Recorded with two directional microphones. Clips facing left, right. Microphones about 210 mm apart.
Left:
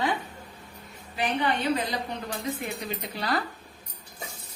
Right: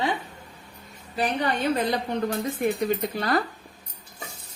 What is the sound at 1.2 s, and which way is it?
A woman's voice, 40° right (ahead or behind).